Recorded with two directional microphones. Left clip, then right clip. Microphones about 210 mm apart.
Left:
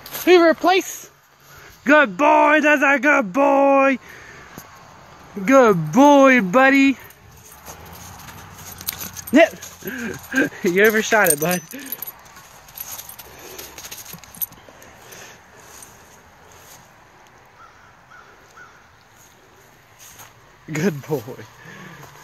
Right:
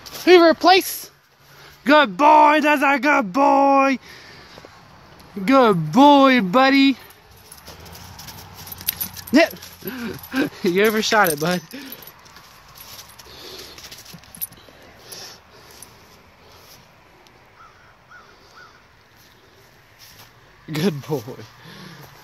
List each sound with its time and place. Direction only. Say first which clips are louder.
0.2 s speech: right 1 dB; 35° right (ahead or behind)
1.9 s speech: right 1 dB; 15° right (ahead or behind)
5.4 s speech: left 2 dB; 10° right (ahead or behind)
8.9 s dog: left 2 dB; 15° right (ahead or behind)
9.8 s speech: left 2 dB; 15° right (ahead or behind)
20.7 s speech: left 1 dB; 15° right (ahead or behind)